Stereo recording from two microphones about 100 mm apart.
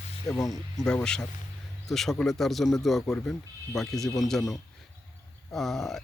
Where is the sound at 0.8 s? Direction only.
10° left (ahead or behind).